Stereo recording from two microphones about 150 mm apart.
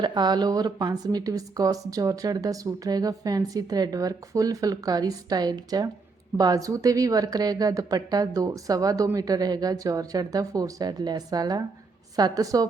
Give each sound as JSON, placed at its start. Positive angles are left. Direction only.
{"t": 0.0, "sound": "speech", "side_deg": -30}